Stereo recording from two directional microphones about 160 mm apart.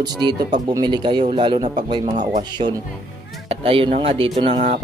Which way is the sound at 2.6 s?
40° right (ahead or behind).